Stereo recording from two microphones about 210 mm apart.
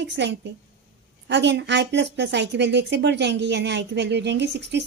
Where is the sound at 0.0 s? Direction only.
55° right (ahead or behind).